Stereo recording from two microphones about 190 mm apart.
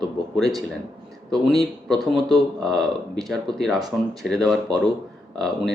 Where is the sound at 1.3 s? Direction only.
Centre (ahead or behind).